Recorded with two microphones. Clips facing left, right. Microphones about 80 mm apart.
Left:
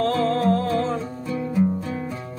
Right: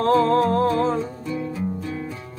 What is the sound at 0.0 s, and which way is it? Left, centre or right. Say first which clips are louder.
Music: right 3 dB; right.